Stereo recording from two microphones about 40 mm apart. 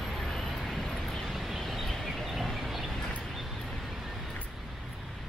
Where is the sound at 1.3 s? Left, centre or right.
Centre.